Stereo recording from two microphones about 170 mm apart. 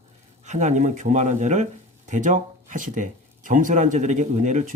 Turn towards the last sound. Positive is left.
turn(degrees=-45)  # may be behind; listen again after turning